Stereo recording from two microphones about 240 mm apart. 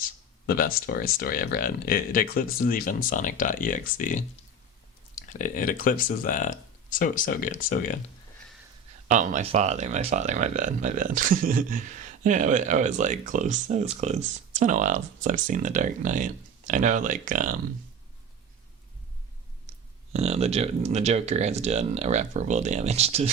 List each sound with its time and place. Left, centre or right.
0.0 s speech: left
9.0 s speech: right
20.1 s speech: right